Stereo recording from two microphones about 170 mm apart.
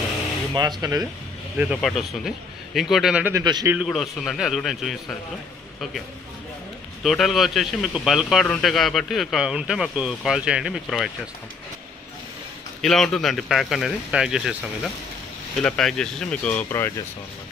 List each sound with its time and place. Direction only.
0.5 s speech: 25° right (ahead or behind)
1.6 s speech: centre (ahead or behind)
7.0 s speech: centre (ahead or behind)
12.8 s speech: 5° left (ahead or behind)